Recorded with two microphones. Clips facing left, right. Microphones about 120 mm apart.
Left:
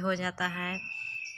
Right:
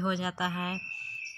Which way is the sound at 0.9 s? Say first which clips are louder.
Left 1 dB; 5° right (ahead or behind).